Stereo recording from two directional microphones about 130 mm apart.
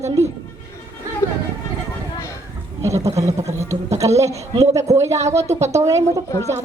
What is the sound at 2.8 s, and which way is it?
Speech, 25° right (ahead or behind).